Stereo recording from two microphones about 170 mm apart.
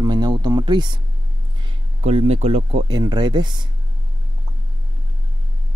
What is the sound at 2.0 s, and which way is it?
Speech, 40° right (ahead or behind).